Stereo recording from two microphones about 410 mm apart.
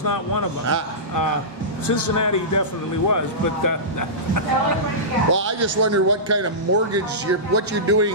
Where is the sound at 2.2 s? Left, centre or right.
Left.